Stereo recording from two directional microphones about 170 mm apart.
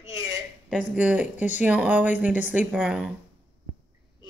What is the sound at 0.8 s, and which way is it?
Speech, 10° right (ahead or behind).